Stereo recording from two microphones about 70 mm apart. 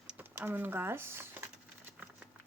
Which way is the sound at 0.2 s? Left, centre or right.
Right.